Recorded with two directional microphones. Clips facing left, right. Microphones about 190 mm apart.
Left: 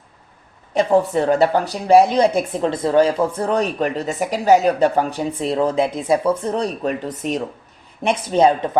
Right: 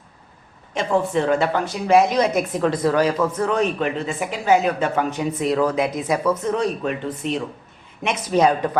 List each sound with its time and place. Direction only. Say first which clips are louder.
0.7 s a woman's voice: left 4 dB; 35° left (ahead or behind)
8.0 s speech: left 3 dB; 30° left (ahead or behind)